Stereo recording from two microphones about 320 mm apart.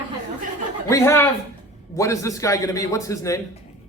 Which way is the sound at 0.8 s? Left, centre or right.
Centre.